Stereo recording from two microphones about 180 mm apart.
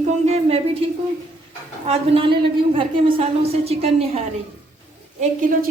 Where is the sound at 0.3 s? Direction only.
35° right (ahead or behind).